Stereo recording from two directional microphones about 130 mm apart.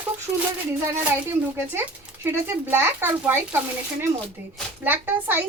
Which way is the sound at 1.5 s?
20° right (ahead or behind).